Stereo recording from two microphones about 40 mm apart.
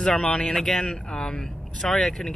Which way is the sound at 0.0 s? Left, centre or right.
Centre.